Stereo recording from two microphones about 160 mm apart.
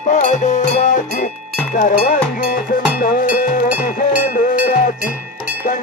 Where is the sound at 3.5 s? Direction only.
60° left (ahead or behind).